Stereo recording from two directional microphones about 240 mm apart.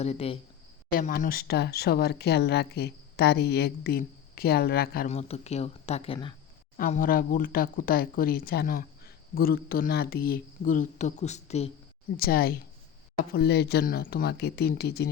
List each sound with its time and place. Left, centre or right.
0.0 s speech: left
0.9 s speech: left
5.0 s speech: left
12.1 s speech: left